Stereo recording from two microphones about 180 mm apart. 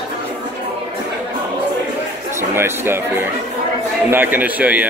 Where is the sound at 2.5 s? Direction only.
15° right (ahead or behind).